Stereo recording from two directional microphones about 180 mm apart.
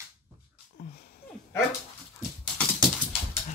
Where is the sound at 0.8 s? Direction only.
55° left (ahead or behind).